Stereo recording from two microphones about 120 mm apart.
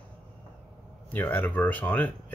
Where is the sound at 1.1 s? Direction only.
15° left (ahead or behind).